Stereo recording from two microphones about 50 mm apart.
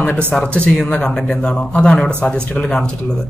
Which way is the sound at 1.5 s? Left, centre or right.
Left.